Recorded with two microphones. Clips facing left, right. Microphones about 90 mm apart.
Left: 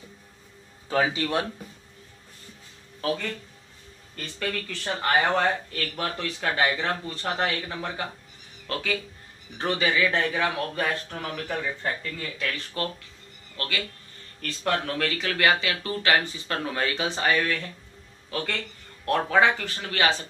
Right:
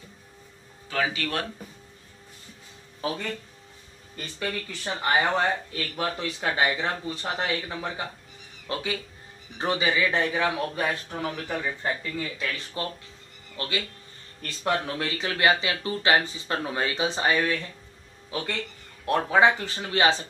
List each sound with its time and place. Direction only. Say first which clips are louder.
0.8 s speech: left 3 dB; 25° left (ahead or behind)
4.2 s speech: left 1 dB; 15° right (ahead or behind)